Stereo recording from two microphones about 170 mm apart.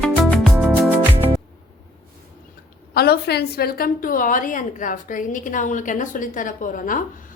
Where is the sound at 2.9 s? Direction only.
65° left (ahead or behind).